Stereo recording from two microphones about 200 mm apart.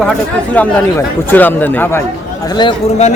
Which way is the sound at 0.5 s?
10° left (ahead or behind).